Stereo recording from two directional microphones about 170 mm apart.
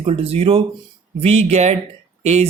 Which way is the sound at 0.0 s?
35° right (ahead or behind).